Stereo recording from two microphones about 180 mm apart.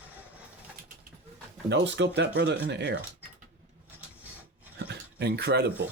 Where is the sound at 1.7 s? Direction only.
80° right.